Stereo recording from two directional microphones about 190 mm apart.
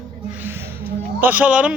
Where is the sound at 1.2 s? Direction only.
10° right (ahead or behind).